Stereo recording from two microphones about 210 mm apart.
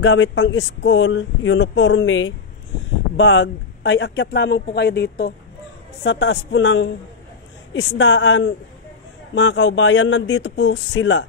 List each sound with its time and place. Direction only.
0.0 s speech: 65° left (ahead or behind)